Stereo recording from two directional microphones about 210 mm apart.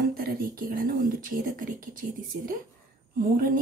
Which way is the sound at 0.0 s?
45° right (ahead or behind).